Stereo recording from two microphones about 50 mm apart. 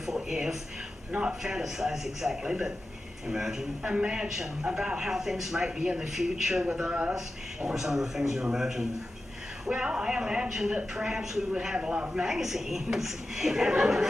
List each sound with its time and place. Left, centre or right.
0.0 s speech: centre
3.8 s a man's voice: right
9.7 s speech: centre